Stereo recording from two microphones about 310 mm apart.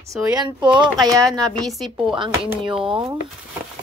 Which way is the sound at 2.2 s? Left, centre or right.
Centre.